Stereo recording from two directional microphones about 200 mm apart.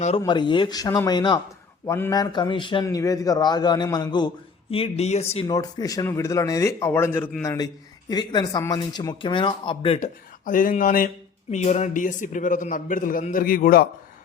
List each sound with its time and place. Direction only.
0.2 s a man's voice: 20° left (ahead or behind)
5.5 s a man's voice: 20° left (ahead or behind)
10.4 s a man's voice: 40° left (ahead or behind)